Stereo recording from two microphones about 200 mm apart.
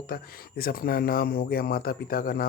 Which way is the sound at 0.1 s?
50° left (ahead or behind).